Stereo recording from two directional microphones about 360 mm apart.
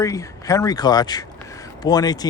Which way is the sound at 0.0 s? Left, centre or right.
Centre.